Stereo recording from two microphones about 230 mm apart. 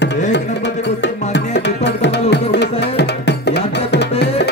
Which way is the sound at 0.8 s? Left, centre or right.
Left.